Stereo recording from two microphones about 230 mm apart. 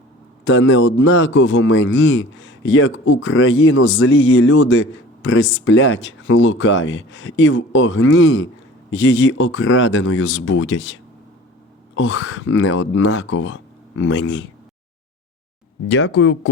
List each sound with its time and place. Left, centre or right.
0.4 s speech: left
15.9 s speech: left